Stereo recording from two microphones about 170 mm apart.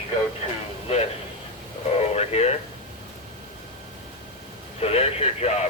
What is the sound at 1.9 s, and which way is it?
Radio, 40° left (ahead or behind).